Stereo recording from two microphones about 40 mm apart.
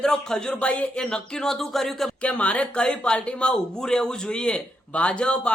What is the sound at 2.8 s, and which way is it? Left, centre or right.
Speech, left.